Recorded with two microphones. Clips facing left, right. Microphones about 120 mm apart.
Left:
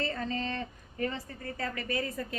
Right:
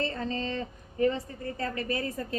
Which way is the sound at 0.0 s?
30° right (ahead or behind).